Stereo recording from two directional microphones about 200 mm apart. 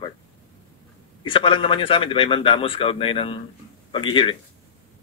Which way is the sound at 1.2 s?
25° left (ahead or behind).